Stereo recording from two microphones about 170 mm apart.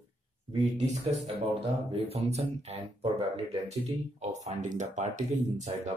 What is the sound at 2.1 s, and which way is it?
Speech, 40° right (ahead or behind).